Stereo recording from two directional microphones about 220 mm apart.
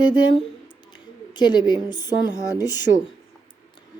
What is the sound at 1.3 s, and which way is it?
A woman's voice, 20° left (ahead or behind).